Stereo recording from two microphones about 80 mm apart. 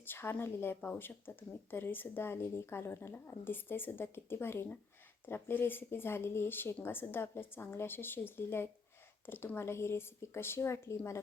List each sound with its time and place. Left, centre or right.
0.0 s a woman's voice: left